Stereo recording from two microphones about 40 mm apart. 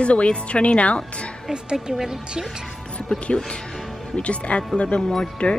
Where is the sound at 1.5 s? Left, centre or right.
Centre.